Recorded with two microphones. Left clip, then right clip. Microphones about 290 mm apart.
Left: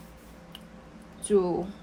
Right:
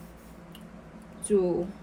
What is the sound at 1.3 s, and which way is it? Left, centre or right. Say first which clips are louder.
Speech: left 1 dB; left.